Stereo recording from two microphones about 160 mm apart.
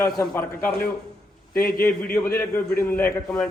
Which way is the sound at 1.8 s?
15° left (ahead or behind).